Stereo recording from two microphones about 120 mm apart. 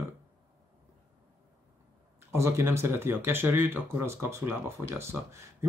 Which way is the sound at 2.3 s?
20° right (ahead or behind).